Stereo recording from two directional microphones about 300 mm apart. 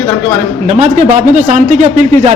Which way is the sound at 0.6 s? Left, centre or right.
Right.